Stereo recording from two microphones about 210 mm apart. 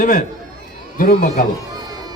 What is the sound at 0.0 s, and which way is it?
A man's voice, 45° left (ahead or behind).